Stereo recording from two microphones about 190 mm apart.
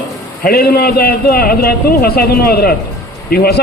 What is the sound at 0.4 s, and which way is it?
A man's voice, 55° left (ahead or behind).